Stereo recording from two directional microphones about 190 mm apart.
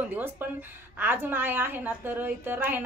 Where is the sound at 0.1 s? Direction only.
10° right (ahead or behind).